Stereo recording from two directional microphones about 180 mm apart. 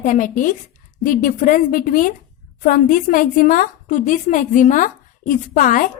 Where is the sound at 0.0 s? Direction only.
45° left (ahead or behind).